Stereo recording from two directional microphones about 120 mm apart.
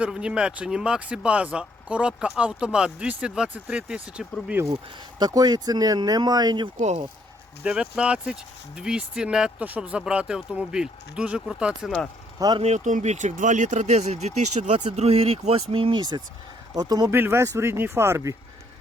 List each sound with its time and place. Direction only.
0.0 s speech: 10° right (ahead or behind)
4.6 s speech: 20° right (ahead or behind)
5.2 s speech: 35° right (ahead or behind)
6.7 s speech: 70° right (ahead or behind)
7.6 s speech: 10° right (ahead or behind)
12.6 s speech: 80° right
14.9 s speech: 55° right (ahead or behind); by 17.1 s 30° right (ahead or behind)
17.1 s speech: 20° right (ahead or behind)